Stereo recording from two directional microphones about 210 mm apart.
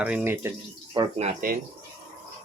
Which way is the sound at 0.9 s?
30° right (ahead or behind).